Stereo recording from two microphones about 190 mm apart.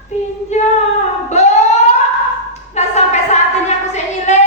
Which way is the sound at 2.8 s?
35° left (ahead or behind).